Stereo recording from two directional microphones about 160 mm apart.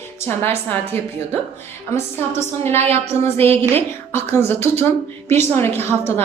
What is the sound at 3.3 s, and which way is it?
A woman's voice, 15° left (ahead or behind).